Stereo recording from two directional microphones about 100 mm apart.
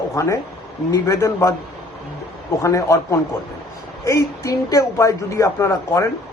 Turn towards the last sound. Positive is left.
turn(degrees=30)  # may be behind; listen again after turning